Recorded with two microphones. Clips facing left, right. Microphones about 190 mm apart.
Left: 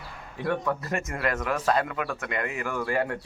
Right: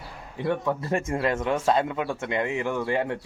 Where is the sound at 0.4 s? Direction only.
20° right (ahead or behind).